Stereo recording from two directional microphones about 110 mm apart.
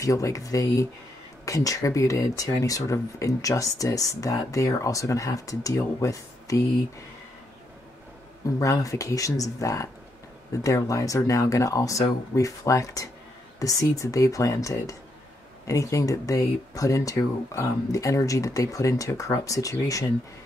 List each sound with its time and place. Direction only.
0.0 s speech: 30° left (ahead or behind)
8.5 s speech: 30° left (ahead or behind)